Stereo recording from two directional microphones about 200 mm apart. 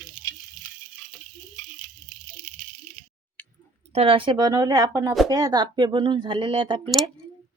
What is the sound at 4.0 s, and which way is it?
Speech, 25° right (ahead or behind).